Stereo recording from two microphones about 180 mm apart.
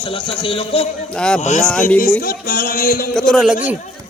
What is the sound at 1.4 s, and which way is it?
Speech, 40° left (ahead or behind).